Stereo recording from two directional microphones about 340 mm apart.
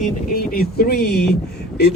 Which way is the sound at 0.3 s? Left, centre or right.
Left.